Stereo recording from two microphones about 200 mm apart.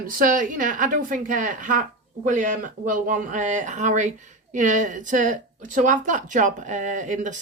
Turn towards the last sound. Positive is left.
turn(degrees=-40)  # may be behind; listen again after turning